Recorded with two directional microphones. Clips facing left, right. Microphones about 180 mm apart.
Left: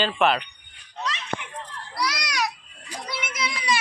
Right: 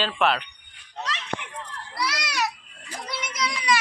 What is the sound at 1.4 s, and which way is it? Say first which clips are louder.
Children playing: even; 65° right (ahead or behind).